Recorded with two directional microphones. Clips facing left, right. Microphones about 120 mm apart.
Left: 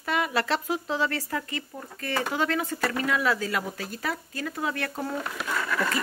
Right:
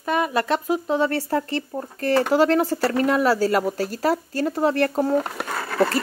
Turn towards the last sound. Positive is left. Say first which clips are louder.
# right 6 dB
turn(degrees=-35)  # may be behind; listen again after turning